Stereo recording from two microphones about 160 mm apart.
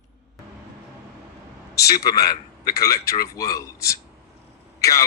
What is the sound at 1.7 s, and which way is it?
Speech, 20° left (ahead or behind).